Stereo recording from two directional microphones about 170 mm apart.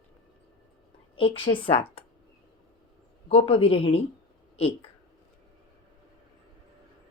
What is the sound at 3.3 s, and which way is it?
Speech, 35° left (ahead or behind).